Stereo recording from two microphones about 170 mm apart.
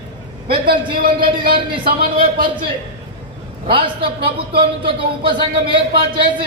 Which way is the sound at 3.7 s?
30° right (ahead or behind).